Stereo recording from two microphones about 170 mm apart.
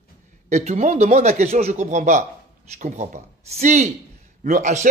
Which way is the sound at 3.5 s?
45° right (ahead or behind).